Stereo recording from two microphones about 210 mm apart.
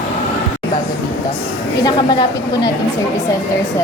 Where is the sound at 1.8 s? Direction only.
20° left (ahead or behind).